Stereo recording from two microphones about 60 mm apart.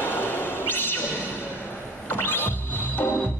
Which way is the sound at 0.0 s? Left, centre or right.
Left.